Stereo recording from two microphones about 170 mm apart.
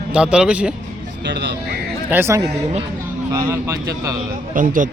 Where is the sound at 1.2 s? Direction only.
90° right.